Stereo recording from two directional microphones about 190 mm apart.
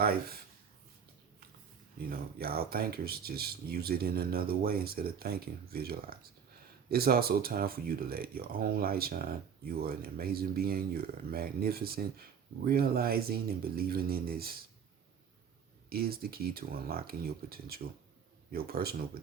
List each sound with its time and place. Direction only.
2.0 s speech: 50° right (ahead or behind)
15.9 s speech: 55° right (ahead or behind)